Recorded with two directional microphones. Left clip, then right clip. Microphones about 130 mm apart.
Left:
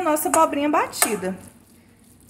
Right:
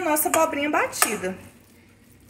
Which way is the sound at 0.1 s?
90° left.